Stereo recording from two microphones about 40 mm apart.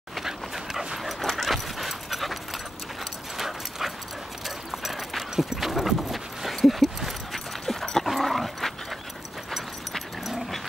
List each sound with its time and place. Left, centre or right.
0.7 s dog: centre
3.3 s dog: centre
4.6 s clip-clop: centre
7.6 s dog: centre